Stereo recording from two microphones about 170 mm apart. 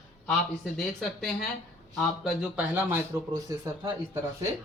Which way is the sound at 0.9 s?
5° left (ahead or behind).